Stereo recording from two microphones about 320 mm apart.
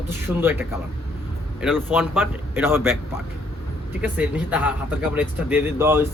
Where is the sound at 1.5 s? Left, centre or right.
Centre.